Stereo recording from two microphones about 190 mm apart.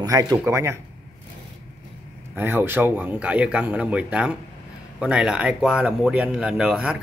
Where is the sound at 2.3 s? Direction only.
10° right (ahead or behind).